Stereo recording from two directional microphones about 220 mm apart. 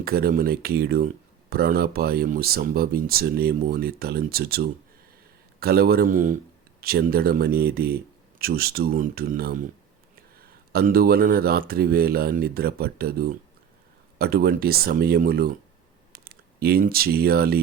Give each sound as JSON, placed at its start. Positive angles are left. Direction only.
{"t": 0.0, "sound": "speech", "side_deg": -45}
{"t": 10.7, "sound": "speech", "side_deg": -45}